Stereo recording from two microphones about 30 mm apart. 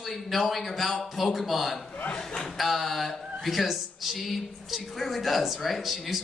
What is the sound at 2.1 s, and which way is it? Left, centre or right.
Speech, centre.